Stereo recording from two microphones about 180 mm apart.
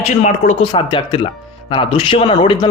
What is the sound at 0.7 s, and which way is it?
A man's voice, 25° left (ahead or behind).